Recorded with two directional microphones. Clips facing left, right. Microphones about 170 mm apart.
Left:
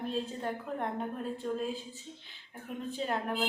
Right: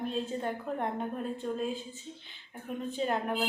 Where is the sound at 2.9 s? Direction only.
Centre (ahead or behind).